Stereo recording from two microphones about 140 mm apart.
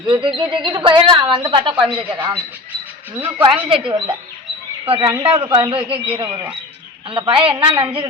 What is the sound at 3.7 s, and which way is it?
A woman's voice, 40° right (ahead or behind).